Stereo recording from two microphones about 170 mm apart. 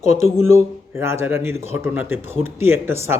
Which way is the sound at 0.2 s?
15° right (ahead or behind).